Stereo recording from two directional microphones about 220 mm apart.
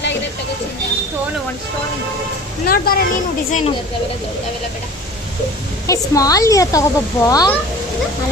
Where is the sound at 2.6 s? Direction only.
40° left (ahead or behind).